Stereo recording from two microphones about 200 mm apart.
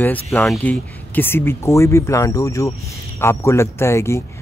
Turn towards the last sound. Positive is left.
turn(degrees=15)  # may be behind; listen again after turning